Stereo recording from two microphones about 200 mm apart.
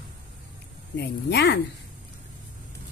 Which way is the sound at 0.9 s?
55° left (ahead or behind).